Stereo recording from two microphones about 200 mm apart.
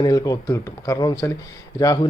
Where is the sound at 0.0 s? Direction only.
15° left (ahead or behind).